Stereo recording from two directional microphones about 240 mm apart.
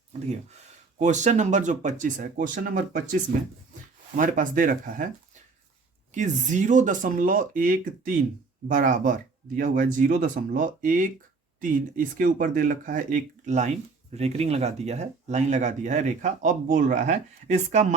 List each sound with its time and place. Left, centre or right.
0.3 s speech: right
4.2 s speech: right
6.1 s speech: right